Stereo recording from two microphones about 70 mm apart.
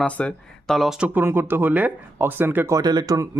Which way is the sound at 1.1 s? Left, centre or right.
Right.